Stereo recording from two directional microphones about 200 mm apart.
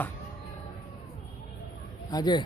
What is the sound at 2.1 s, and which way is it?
Speech, 20° left (ahead or behind).